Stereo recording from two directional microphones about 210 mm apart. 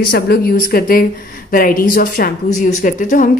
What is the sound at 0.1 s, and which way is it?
Speech, 45° left (ahead or behind).